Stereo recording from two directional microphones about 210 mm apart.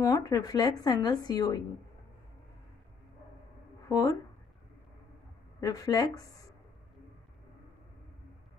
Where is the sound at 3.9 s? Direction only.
15° left (ahead or behind).